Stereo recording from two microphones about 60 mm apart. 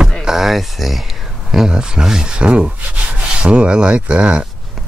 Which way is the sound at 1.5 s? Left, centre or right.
Centre.